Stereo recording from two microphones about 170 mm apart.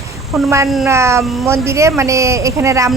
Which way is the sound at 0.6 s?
Centre (ahead or behind).